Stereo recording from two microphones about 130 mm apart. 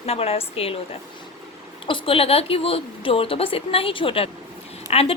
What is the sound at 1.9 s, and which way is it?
Speech, 40° left (ahead or behind).